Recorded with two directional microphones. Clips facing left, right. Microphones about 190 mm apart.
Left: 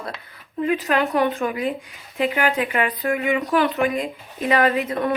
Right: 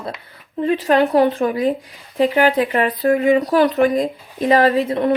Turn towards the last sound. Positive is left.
turn(degrees=-30)  # may be behind; listen again after turning